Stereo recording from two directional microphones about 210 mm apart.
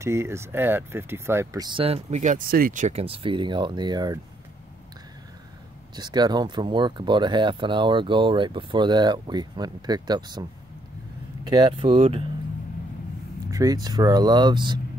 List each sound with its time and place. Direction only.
0.0 s speech: 15° right (ahead or behind)
5.9 s speech: 20° right (ahead or behind)
11.4 s speech: 20° right (ahead or behind)
13.5 s a sound: 15° right (ahead or behind)
13.8 s speech: 20° right (ahead or behind)